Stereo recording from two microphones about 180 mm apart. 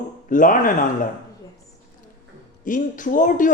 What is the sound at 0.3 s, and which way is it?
Speech, 45° left (ahead or behind).